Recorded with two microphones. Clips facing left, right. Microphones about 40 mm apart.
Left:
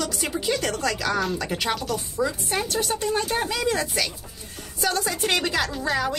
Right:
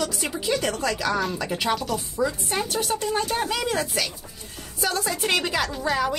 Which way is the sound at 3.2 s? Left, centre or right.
Centre.